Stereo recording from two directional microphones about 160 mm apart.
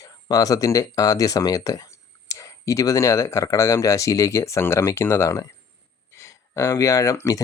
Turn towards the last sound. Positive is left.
turn(degrees=20)  # may be behind; listen again after turning